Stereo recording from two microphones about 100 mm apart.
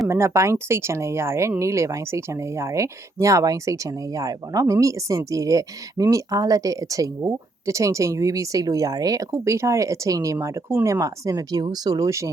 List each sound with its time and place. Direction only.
0.1 s speech: 30° right (ahead or behind)
11.0 s speech: 35° right (ahead or behind)